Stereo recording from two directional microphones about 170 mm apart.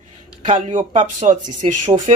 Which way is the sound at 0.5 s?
45° right (ahead or behind).